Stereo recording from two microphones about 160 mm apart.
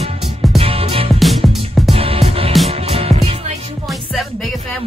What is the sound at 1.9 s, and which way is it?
Music, 35° right (ahead or behind).